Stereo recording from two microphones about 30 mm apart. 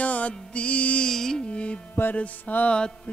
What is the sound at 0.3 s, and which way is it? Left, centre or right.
Music, left.